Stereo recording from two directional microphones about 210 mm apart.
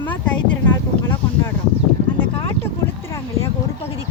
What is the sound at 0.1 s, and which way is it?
Speech, 10° left (ahead or behind).